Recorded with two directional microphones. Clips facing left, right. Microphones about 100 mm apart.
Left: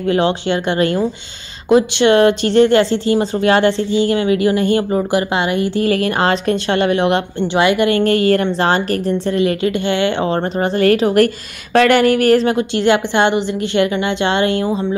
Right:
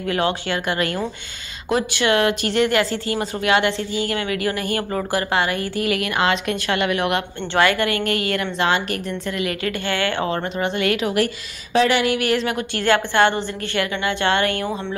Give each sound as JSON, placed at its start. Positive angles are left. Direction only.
{"t": 0.1, "sound": "a woman's voice", "side_deg": 25}
{"t": 5.9, "sound": "a woman's voice", "side_deg": 35}
{"t": 7.5, "sound": "a woman's voice", "side_deg": 20}
{"t": 8.0, "sound": "a woman's voice", "side_deg": 35}
{"t": 10.3, "sound": "a woman's voice", "side_deg": 40}
{"t": 11.7, "sound": "speech", "side_deg": 55}
{"t": 12.5, "sound": "a woman's voice", "side_deg": 20}